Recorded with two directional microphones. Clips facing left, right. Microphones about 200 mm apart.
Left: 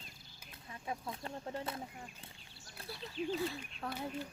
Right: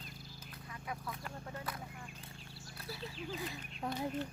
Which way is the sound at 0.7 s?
25° left (ahead or behind).